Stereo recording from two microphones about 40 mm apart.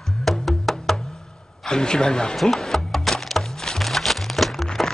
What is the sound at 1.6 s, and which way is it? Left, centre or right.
Speech, centre.